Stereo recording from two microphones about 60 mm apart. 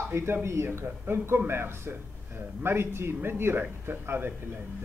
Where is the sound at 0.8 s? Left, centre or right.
Right.